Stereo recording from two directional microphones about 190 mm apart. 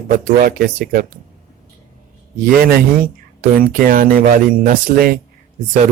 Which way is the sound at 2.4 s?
55° right (ahead or behind).